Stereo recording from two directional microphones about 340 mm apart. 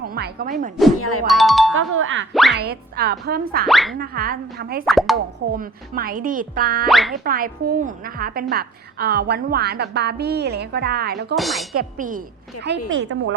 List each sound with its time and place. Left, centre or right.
0.0 s speech: right
0.9 s music: left
1.3 s speech: centre
1.7 s a woman's voice: right
3.7 s speech: centre
3.9 s a woman's voice: right
4.9 s speech: centre
5.5 s a woman's voice: right
6.8 s speech: centre
7.3 s a woman's voice: right
11.3 s speech: centre
11.7 s a woman's voice: right